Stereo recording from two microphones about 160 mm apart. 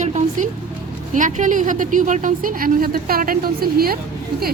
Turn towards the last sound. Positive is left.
turn(degrees=-70)  # may be behind; listen again after turning